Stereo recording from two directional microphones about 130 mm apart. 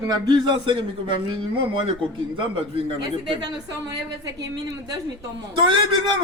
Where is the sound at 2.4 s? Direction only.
40° right (ahead or behind).